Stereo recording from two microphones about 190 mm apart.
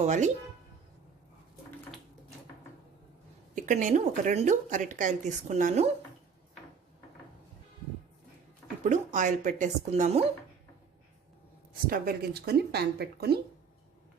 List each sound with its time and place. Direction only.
0.0 s a woman's voice: 40° right (ahead or behind)
3.5 s a woman's voice: 40° right (ahead or behind)
8.8 s a woman's voice: 40° right (ahead or behind)
11.9 s speech: 55° right (ahead or behind)